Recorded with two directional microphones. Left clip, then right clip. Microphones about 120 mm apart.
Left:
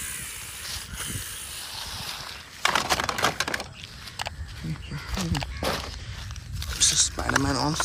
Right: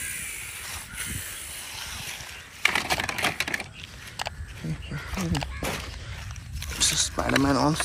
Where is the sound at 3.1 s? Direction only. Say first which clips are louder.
Left 1 dB; 35° left (ahead or behind).